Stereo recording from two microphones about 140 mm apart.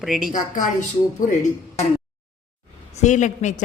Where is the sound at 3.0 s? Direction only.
60° left (ahead or behind).